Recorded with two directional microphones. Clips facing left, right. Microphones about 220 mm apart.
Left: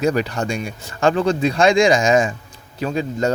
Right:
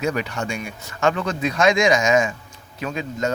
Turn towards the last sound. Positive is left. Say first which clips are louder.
# left 4 dB
turn(degrees=35)  # may be behind; listen again after turning